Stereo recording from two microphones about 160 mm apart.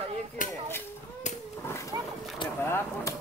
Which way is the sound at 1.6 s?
15° left (ahead or behind).